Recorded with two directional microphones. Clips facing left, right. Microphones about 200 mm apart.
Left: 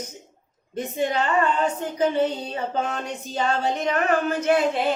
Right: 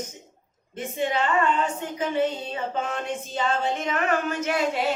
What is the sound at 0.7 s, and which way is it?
Speech, 40° left (ahead or behind).